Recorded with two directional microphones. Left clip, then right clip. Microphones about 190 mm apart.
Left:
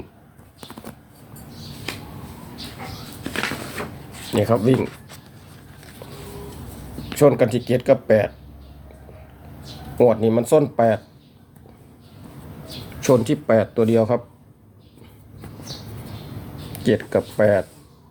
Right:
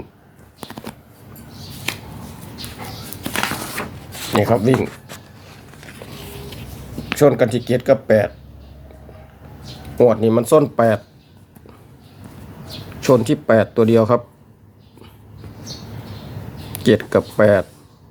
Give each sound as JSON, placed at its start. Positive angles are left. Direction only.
{"t": 0.6, "sound": "shuffling cards", "side_deg": -35}
{"t": 1.9, "sound": "a sound", "side_deg": -40}
{"t": 3.2, "sound": "a sound", "side_deg": -45}
{"t": 4.4, "sound": "speech", "side_deg": -5}
{"t": 7.2, "sound": "speech", "side_deg": -5}
{"t": 10.0, "sound": "speech", "side_deg": -10}
{"t": 13.0, "sound": "speech", "side_deg": -10}
{"t": 16.7, "sound": "speech", "side_deg": -20}